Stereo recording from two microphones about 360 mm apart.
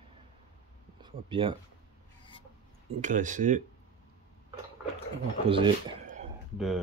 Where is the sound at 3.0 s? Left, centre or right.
Right.